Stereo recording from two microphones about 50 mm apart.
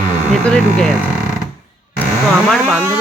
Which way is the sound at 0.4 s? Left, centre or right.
Centre.